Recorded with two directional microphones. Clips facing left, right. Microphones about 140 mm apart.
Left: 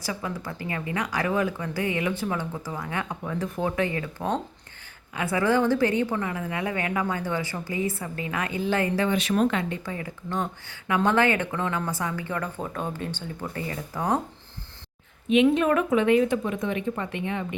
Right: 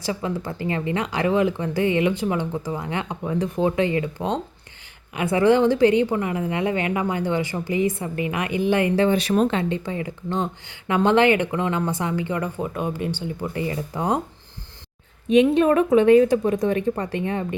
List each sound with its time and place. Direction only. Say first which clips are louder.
0.0 s speech: right 5 dB; 25° right (ahead or behind)
9.0 s speech: right 4 dB; 35° right (ahead or behind)
15.3 s speech: right 4 dB; 35° right (ahead or behind)